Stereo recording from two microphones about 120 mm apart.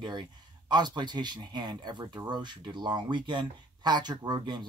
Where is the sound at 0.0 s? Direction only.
40° right (ahead or behind).